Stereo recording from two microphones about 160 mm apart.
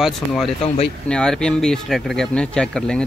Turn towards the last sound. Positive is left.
turn(degrees=5)  # may be behind; listen again after turning